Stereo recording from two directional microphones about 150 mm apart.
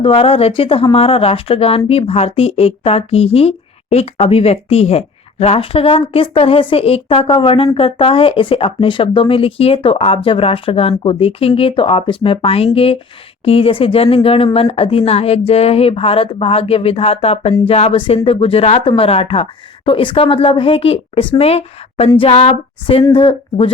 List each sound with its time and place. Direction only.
0.0 s speech: 40° left (ahead or behind)